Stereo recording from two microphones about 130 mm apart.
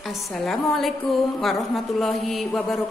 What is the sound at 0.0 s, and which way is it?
A woman's voice, centre (ahead or behind).